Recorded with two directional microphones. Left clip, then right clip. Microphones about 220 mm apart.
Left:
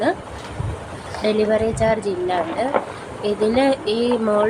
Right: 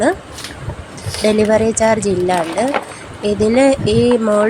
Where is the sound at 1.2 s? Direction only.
25° right (ahead or behind).